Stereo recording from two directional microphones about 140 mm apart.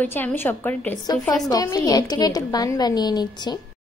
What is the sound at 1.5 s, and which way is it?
A woman's voice, 25° left (ahead or behind).